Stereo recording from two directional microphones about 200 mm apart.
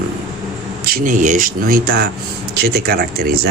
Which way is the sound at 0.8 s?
45° right (ahead or behind).